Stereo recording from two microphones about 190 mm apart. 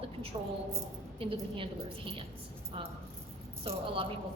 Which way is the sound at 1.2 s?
30° right (ahead or behind).